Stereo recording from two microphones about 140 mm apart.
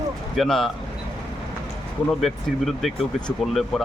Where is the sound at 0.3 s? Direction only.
5° left (ahead or behind).